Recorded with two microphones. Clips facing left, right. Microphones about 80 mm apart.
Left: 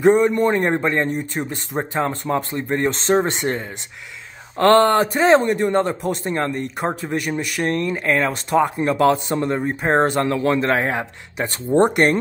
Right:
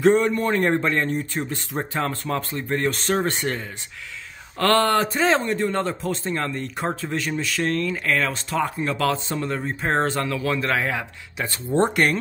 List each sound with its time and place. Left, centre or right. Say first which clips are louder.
0.0 s a man's voice: left 3 dB; centre
10.2 s a man's voice: left 6 dB; left
11.7 s speech: left 5 dB; centre